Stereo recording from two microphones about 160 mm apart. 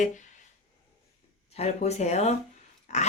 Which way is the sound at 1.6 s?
45° left (ahead or behind).